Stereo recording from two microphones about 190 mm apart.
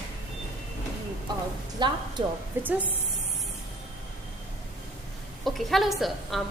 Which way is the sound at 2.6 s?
10° right (ahead or behind).